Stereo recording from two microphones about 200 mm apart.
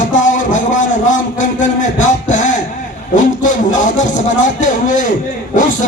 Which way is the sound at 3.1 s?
40° left (ahead or behind).